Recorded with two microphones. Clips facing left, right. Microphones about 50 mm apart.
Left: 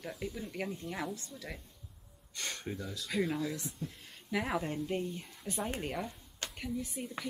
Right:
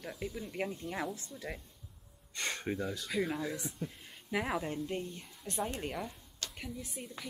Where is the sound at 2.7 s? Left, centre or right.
Right.